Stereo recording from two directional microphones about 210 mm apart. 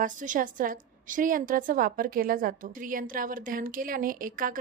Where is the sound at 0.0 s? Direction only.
40° right (ahead or behind).